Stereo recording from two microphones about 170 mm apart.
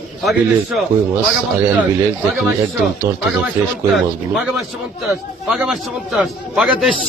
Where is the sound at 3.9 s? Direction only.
Centre (ahead or behind).